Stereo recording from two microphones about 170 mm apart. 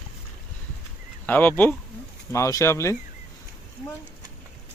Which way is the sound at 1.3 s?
10° left (ahead or behind).